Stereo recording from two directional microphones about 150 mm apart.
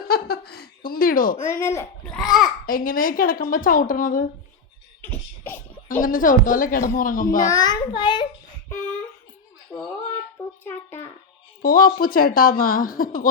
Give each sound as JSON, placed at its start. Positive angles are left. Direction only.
{"t": 0.0, "sound": "speech", "side_deg": 90}
{"t": 1.5, "sound": "a child's voice", "side_deg": 20}
{"t": 2.0, "sound": "a child's voice", "side_deg": 0}
{"t": 2.6, "sound": "a woman's voice", "side_deg": 70}
{"t": 5.0, "sound": "a sound", "side_deg": 15}
{"t": 6.0, "sound": "a woman's voice", "side_deg": 65}
{"t": 7.4, "sound": "a child's voice", "side_deg": 25}
{"t": 8.7, "sound": "a sound", "side_deg": 15}
{"t": 9.7, "sound": "a child's voice", "side_deg": 15}
{"t": 11.6, "sound": "a woman's voice", "side_deg": 70}